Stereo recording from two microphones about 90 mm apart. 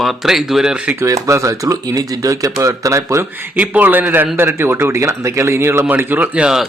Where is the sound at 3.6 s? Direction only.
20° right (ahead or behind).